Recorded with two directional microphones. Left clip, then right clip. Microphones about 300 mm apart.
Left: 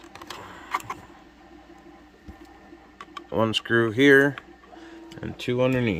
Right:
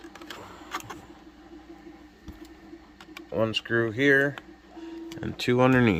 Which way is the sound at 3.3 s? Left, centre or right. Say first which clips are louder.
Left 3 dB; left.